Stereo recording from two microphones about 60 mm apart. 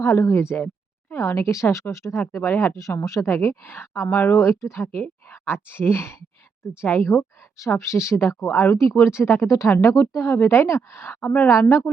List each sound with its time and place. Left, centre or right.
0.0 s a woman's voice: left
2.3 s speech: left
2.7 s a woman's voice: left
6.8 s speech: left
7.7 s a woman's voice: left
8.7 s speech: left
9.0 s a woman's voice: left
9.5 s a woman's voice: left